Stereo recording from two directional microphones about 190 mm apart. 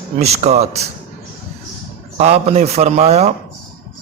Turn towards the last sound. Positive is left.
turn(degrees=-35)  # may be behind; listen again after turning